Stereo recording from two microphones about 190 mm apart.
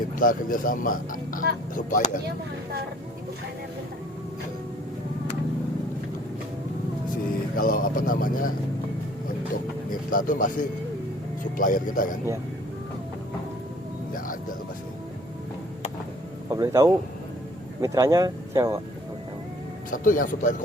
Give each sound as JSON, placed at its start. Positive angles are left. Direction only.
{"t": 0.0, "sound": "speech", "side_deg": 45}
{"t": 7.5, "sound": "speech", "side_deg": 45}
{"t": 9.9, "sound": "speech", "side_deg": 45}
{"t": 16.5, "sound": "speech", "side_deg": -15}
{"t": 19.9, "sound": "speech", "side_deg": 45}